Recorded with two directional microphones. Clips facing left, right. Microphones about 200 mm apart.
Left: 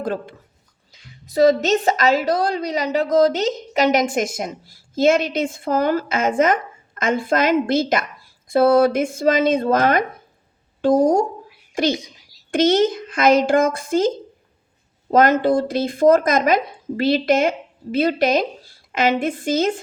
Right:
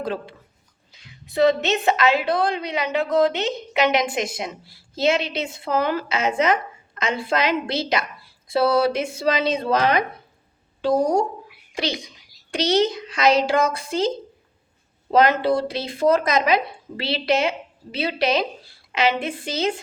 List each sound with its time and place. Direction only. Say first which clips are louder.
0.0 s a woman's voice: left 3 dB; 50° left (ahead or behind)
15.1 s a woman's voice: left 3 dB; 45° left (ahead or behind)